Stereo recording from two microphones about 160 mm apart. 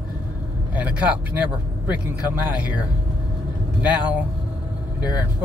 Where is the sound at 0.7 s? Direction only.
10° right (ahead or behind).